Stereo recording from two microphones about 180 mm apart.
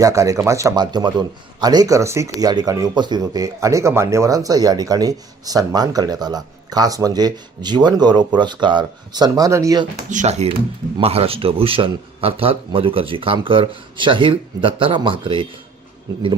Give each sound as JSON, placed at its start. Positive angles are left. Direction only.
{"t": 0.0, "sound": "speech", "side_deg": -20}
{"t": 10.1, "sound": "speech", "side_deg": -40}